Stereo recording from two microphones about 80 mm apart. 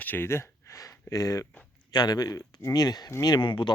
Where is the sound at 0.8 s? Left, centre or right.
Left.